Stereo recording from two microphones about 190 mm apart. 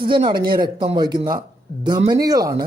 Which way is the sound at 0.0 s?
25° right (ahead or behind).